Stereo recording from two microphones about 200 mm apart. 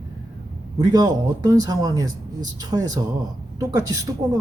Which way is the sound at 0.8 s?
20° right (ahead or behind).